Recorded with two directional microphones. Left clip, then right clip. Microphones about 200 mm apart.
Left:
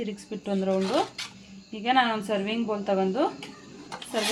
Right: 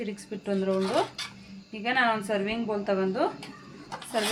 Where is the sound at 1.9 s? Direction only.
55° left (ahead or behind).